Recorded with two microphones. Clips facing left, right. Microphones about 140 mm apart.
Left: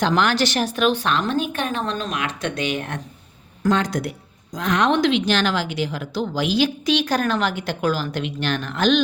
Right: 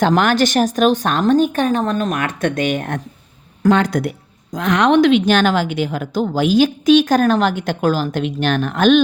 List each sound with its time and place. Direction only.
0.0 s a woman's voice: 50° right (ahead or behind)
3.6 s speech: 60° right (ahead or behind)
4.5 s a woman's voice: 70° right (ahead or behind); by 9.0 s 50° right (ahead or behind)